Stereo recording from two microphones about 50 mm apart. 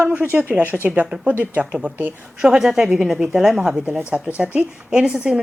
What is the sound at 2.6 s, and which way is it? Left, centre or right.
Speech, centre.